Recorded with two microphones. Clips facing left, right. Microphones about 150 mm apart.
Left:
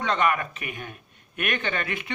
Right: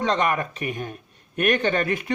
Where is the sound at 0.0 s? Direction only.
35° right (ahead or behind).